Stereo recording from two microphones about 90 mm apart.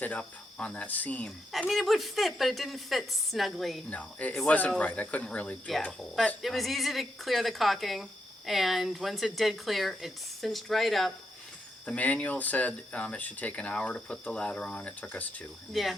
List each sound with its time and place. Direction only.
0.0 s speech: 15° left (ahead or behind)
1.5 s speech: centre (ahead or behind)
3.8 s speech: 15° left (ahead or behind)
5.8 s speech: centre (ahead or behind)
11.9 s speech: 15° left (ahead or behind)
15.7 s speech: centre (ahead or behind)